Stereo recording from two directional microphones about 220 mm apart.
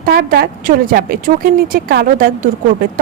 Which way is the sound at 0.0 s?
40° right (ahead or behind).